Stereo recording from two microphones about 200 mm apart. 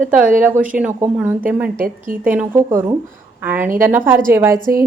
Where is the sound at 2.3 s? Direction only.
10° right (ahead or behind).